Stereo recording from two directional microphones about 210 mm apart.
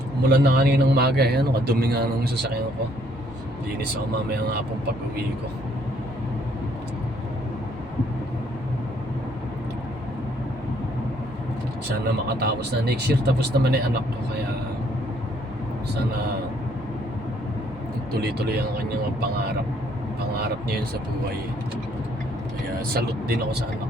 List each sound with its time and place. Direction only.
0.3 s a man's voice: 50° right (ahead or behind)
12.4 s a man's voice: 50° right (ahead or behind)
18.2 s a man's voice: 50° right (ahead or behind)
23.0 s a man's voice: 50° right (ahead or behind)